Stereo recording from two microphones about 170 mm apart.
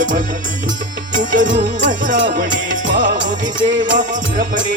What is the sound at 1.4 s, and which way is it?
Music, 50° right (ahead or behind).